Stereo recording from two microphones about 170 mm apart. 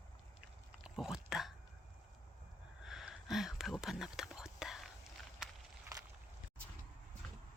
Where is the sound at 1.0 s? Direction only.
Centre (ahead or behind).